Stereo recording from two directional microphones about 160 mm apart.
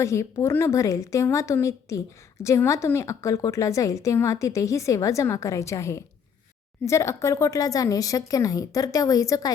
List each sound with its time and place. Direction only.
0.0 s a woman's voice: 20° left (ahead or behind)